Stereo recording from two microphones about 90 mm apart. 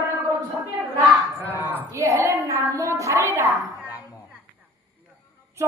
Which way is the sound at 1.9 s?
35° right (ahead or behind).